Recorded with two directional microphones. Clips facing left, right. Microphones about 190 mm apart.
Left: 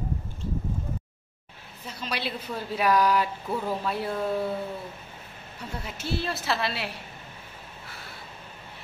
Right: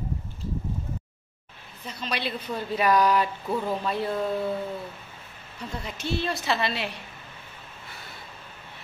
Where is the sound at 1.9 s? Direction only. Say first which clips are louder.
Right 1 dB; 5° left (ahead or behind).